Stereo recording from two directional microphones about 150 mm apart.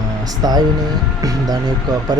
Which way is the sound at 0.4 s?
25° right (ahead or behind).